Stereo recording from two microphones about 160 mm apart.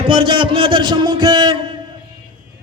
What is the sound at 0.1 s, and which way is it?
A man's voice, 35° right (ahead or behind).